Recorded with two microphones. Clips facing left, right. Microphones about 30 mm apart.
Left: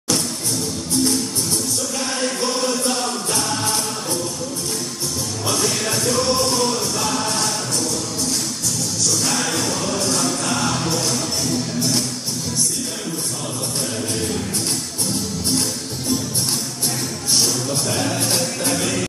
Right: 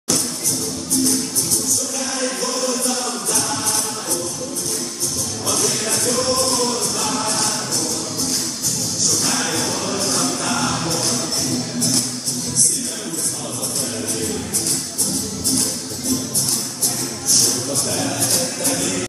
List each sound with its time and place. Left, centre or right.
5.5 s music: left
6.0 s music: centre
9.0 s music: centre
17.9 s music: centre
18.2 s a sound: left